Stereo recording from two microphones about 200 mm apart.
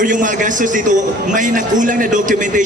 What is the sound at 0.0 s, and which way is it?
A man's voice, 40° right (ahead or behind).